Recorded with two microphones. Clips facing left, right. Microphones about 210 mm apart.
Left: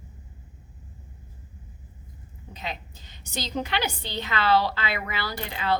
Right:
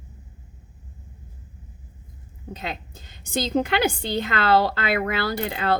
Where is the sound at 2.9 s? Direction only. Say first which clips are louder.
Right 8 dB; 50° right (ahead or behind).